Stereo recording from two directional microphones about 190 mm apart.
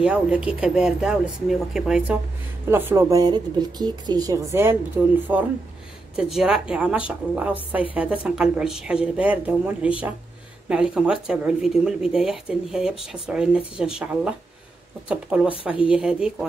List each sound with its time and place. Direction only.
0.0 s speech: 5° right (ahead or behind)